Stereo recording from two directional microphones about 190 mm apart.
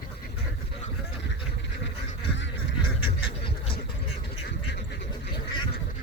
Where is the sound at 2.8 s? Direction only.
25° left (ahead or behind).